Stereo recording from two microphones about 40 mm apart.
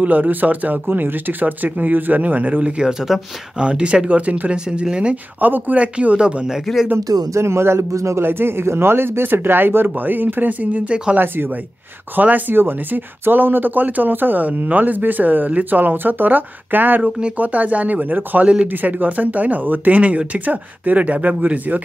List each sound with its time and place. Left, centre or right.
0.0 s speech: right
2.8 s speech: centre
3.5 s speech: right
5.1 s speech: right
5.8 s speech: right
7.4 s a man's voice: right
9.9 s speech: right
11.1 s a man's voice: right
12.2 s speech: right
12.5 s speech: right
17.4 s speech: right